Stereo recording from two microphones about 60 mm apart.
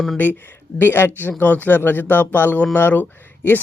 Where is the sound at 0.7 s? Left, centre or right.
Left.